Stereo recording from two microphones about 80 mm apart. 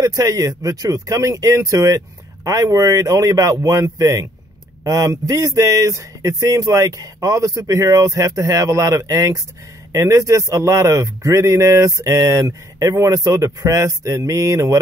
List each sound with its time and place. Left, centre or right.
0.0 s a man's voice: right